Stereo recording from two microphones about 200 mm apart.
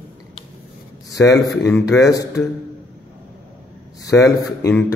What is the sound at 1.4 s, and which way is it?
Speech, centre (ahead or behind).